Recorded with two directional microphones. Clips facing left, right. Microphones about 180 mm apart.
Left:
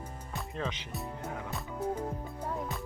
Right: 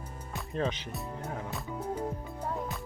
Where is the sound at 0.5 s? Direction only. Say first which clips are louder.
Right 6 dB; 40° right (ahead or behind).